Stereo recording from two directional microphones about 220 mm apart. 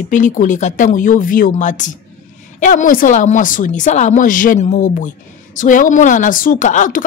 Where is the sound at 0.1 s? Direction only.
35° left (ahead or behind).